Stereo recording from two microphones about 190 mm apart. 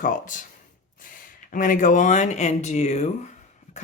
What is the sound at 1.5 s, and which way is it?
A woman's voice, 45° left (ahead or behind).